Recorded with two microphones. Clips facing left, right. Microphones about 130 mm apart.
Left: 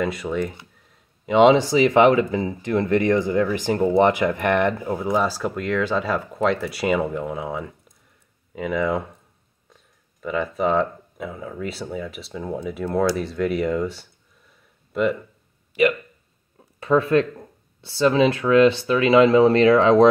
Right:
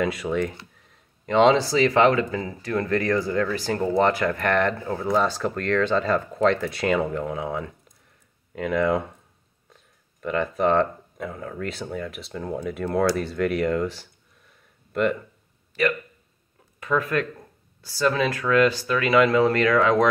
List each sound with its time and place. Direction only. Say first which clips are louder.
0.0 s speech: even; centre (ahead or behind)
10.2 s speech: even; centre (ahead or behind)
15.7 s speech: left 5 dB; 15° left (ahead or behind)
16.8 s speech: left 6 dB; 30° left (ahead or behind)